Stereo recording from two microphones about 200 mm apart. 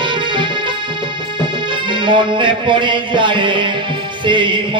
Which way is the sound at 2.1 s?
25° right (ahead or behind).